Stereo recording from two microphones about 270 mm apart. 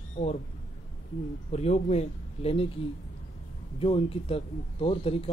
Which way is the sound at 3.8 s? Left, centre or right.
Left.